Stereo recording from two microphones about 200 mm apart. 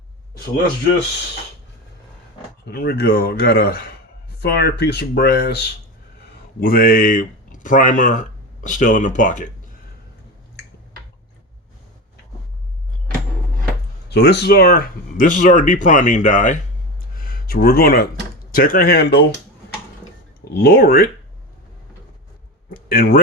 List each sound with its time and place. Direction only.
2.6 s speech: 55° left (ahead or behind)
14.1 s speech: 55° left (ahead or behind)
20.4 s speech: 55° left (ahead or behind)
22.7 s speech: 50° left (ahead or behind)